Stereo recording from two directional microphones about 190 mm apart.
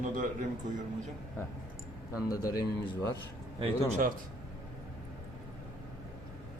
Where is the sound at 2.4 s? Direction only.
20° left (ahead or behind).